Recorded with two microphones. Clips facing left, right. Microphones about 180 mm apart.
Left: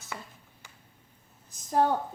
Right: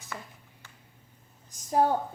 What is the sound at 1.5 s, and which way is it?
Speech, 10° right (ahead or behind).